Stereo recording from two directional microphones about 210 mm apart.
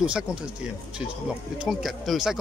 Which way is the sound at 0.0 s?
5° right (ahead or behind).